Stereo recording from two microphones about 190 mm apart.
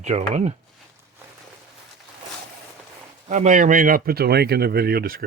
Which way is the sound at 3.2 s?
40° right (ahead or behind).